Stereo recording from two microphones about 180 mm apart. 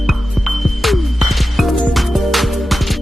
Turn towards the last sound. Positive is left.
turn(degrees=0)  # may be behind; listen again after turning